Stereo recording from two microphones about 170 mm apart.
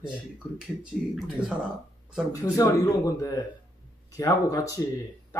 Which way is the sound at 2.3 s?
20° left (ahead or behind).